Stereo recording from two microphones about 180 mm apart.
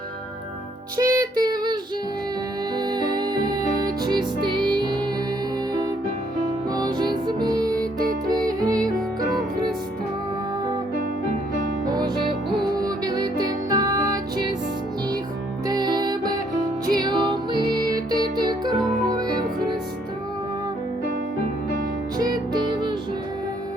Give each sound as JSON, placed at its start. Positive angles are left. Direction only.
{"t": 0.9, "sound": "music", "side_deg": -20}
{"t": 6.7, "sound": "music", "side_deg": -25}
{"t": 11.9, "sound": "music", "side_deg": -20}
{"t": 15.6, "sound": "music", "side_deg": -25}
{"t": 22.2, "sound": "music", "side_deg": -25}